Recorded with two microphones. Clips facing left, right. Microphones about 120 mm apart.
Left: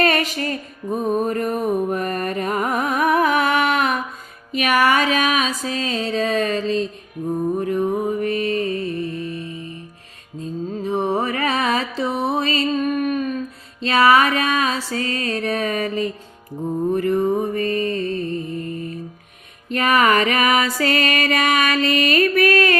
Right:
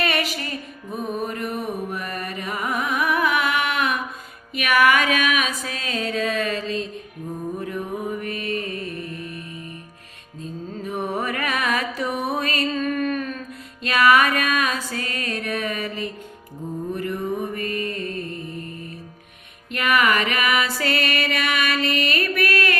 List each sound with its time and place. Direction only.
0.0 s music: 40° left (ahead or behind); by 13.4 s 15° left (ahead or behind)
13.8 s music: 30° left (ahead or behind)
19.7 s music: 40° left (ahead or behind)